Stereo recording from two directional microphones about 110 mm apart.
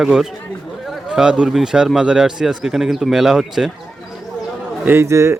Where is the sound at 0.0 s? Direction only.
5° right (ahead or behind).